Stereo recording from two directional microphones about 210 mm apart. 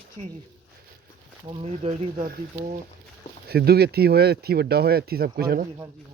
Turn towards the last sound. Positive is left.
turn(degrees=-45)  # may be behind; listen again after turning